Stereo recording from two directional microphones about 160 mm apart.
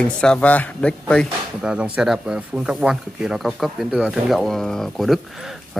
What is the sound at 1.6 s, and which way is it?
Speech, 5° right (ahead or behind).